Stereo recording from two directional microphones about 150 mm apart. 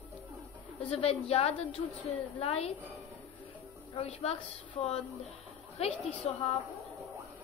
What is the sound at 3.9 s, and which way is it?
Speech, 40° left (ahead or behind).